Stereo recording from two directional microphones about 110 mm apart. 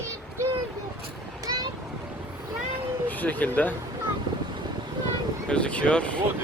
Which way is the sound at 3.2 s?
15° left (ahead or behind).